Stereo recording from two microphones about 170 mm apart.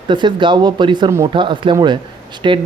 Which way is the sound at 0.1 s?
25° right (ahead or behind).